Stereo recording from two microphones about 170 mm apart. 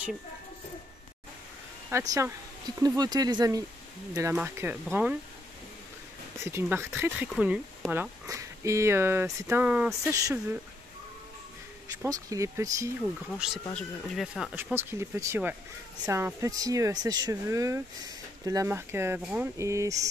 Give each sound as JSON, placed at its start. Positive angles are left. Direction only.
{"t": 1.9, "sound": "speech", "side_deg": -15}
{"t": 6.4, "sound": "speech", "side_deg": -15}
{"t": 12.0, "sound": "speech", "side_deg": -20}
{"t": 13.0, "sound": "speech", "side_deg": 0}